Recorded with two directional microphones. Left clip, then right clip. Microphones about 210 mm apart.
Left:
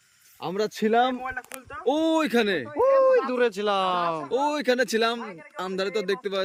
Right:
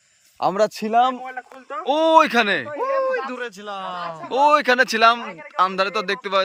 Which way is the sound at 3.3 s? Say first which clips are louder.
Left 6 dB; 65° left (ahead or behind).